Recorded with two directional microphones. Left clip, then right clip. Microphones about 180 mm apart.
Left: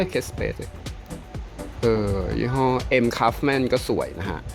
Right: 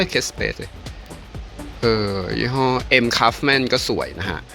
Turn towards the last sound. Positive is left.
turn(degrees=5)  # may be behind; listen again after turning